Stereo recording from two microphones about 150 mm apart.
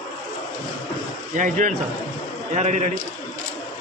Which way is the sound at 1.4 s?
60° right (ahead or behind).